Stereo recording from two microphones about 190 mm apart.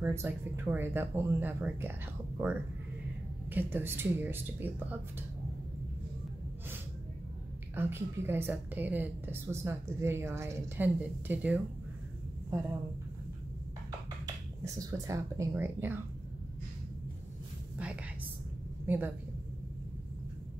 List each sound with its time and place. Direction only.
0.0 s a woman's voice: 15° right (ahead or behind)
7.7 s a woman's voice: 10° right (ahead or behind)
14.2 s speech: 20° right (ahead or behind)
18.9 s a woman's voice: 10° right (ahead or behind)